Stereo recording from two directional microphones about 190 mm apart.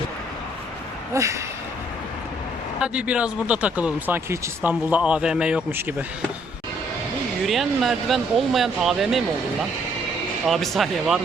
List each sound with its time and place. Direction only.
1.1 s speech: 15° right (ahead or behind)
2.7 s speech: 5° right (ahead or behind)
7.4 s speech: centre (ahead or behind)
10.4 s speech: centre (ahead or behind)